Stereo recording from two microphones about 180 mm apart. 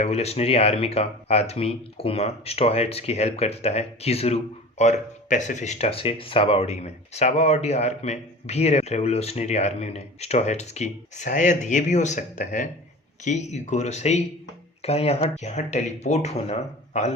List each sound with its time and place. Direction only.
0.0 s speech: 35° left (ahead or behind)